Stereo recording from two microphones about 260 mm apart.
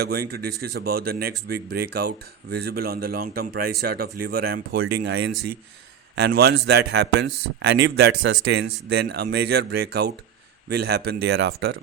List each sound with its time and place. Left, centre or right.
0.0 s speech: right
6.1 s speech: right